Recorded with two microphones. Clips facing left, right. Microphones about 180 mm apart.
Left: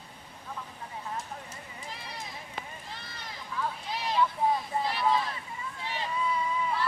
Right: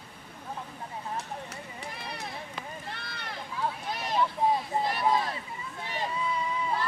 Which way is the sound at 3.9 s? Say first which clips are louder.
Even; 50° right (ahead or behind).